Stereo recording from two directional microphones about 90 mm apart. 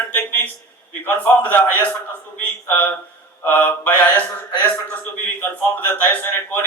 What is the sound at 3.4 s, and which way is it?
A man's voice, 20° left (ahead or behind).